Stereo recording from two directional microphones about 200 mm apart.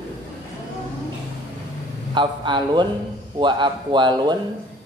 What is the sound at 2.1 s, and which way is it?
A man's voice, 25° right (ahead or behind).